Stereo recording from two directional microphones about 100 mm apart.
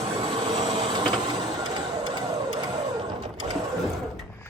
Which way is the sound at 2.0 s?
50° right (ahead or behind).